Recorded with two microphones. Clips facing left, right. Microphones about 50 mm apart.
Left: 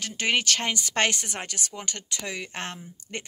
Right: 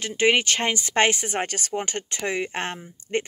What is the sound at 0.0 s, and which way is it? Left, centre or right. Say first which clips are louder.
Speech: right 5 dB; right.